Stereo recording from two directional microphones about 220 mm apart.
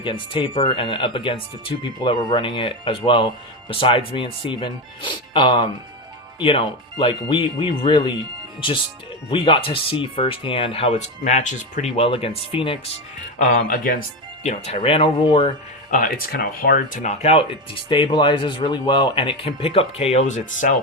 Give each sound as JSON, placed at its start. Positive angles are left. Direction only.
{"t": 0.0, "sound": "speech", "side_deg": 25}
{"t": 7.3, "sound": "speech", "side_deg": 20}
{"t": 13.4, "sound": "speech", "side_deg": 40}
{"t": 15.9, "sound": "speech", "side_deg": 40}